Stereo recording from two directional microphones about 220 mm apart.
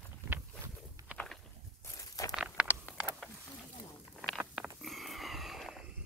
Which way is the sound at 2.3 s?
5° right (ahead or behind).